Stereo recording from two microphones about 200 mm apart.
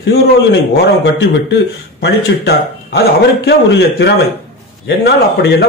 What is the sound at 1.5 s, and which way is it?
A man's voice, 55° left (ahead or behind).